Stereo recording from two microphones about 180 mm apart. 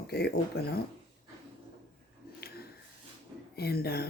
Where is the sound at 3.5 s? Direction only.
60° left (ahead or behind).